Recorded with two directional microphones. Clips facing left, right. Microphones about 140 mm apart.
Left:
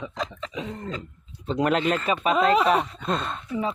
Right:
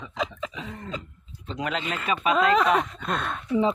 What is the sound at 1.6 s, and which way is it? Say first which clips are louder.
Speech: left 7 dB; 50° left (ahead or behind).